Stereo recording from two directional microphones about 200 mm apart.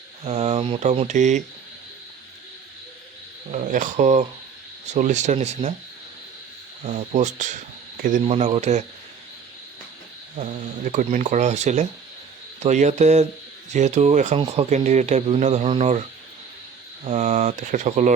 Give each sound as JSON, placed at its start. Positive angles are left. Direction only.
{"t": 0.3, "sound": "speech", "side_deg": -30}
{"t": 3.5, "sound": "speech", "side_deg": -40}
{"t": 6.8, "sound": "speech", "side_deg": -35}
{"t": 10.3, "sound": "speech", "side_deg": -40}
{"t": 17.0, "sound": "speech", "side_deg": -30}